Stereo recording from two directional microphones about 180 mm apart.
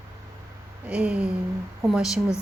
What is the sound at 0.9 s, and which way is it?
A woman's voice, 5° right (ahead or behind).